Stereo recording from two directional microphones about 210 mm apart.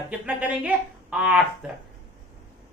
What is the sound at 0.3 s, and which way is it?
Speech, 10° right (ahead or behind).